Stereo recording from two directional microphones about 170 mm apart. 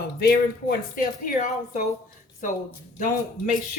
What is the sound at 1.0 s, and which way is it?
Speech, 55° left (ahead or behind).